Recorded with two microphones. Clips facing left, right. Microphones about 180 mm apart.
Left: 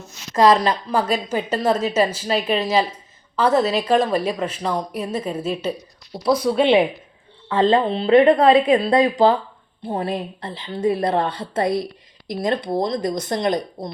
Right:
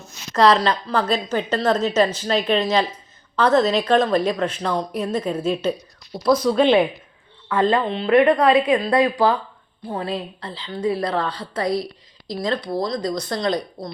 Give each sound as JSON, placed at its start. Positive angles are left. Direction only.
{"t": 0.3, "sound": "a woman's voice", "side_deg": 15}
{"t": 7.4, "sound": "speech", "side_deg": 25}